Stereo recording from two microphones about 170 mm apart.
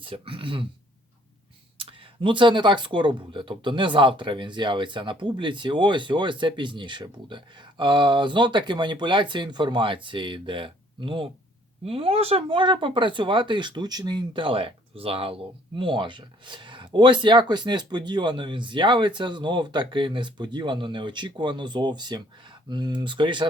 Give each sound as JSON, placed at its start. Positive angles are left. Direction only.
{"t": 0.0, "sound": "speech", "side_deg": -30}
{"t": 1.8, "sound": "speech", "side_deg": -30}